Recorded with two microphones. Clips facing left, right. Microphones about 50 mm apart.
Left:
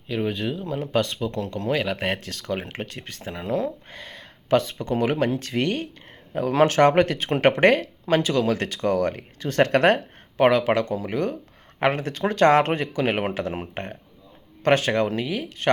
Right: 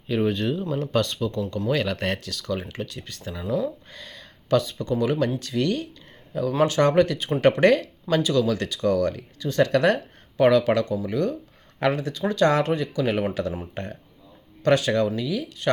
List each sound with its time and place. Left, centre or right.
0.1 s speech: centre
1.0 s speech: left
2.2 s speech: left
3.8 s speech: left